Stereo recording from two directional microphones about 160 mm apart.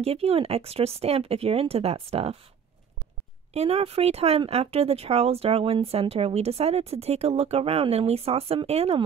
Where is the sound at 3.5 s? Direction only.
40° right (ahead or behind).